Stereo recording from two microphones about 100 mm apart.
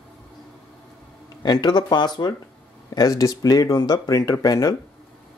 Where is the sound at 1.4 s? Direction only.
45° left (ahead or behind).